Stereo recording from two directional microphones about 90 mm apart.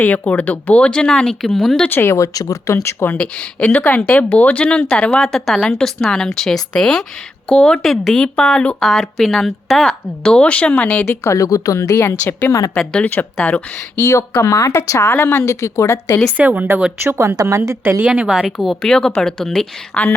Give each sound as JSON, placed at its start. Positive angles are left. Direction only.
{"t": 0.0, "sound": "speech", "side_deg": 15}
{"t": 1.9, "sound": "speech", "side_deg": 25}
{"t": 3.2, "sound": "speech", "side_deg": 15}
{"t": 5.2, "sound": "speech", "side_deg": 0}
{"t": 11.0, "sound": "speech", "side_deg": 30}
{"t": 13.9, "sound": "speech", "side_deg": 30}
{"t": 16.4, "sound": "speech", "side_deg": -20}
{"t": 17.2, "sound": "a woman's voice", "side_deg": -35}
{"t": 18.0, "sound": "speech", "side_deg": -10}